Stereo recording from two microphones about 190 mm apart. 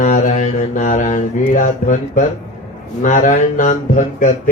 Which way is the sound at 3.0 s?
40° left (ahead or behind).